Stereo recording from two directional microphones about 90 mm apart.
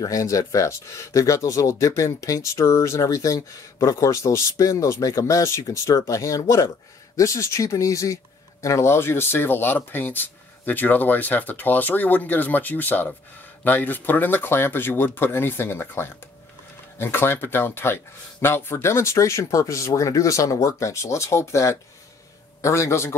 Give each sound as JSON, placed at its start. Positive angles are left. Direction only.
{"t": 0.0, "sound": "speech", "side_deg": 40}